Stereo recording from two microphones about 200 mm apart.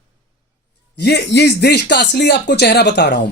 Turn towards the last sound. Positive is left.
turn(degrees=55)  # may be behind; listen again after turning